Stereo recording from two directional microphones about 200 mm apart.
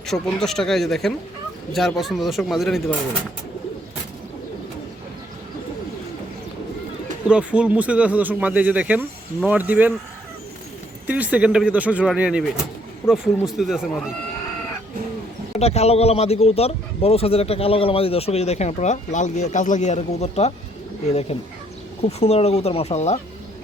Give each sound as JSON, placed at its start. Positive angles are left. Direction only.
{"t": 0.1, "sound": "speech", "side_deg": 0}
{"t": 7.3, "sound": "speech", "side_deg": -5}
{"t": 11.0, "sound": "speech", "side_deg": -5}
{"t": 15.5, "sound": "a man's voice", "side_deg": 30}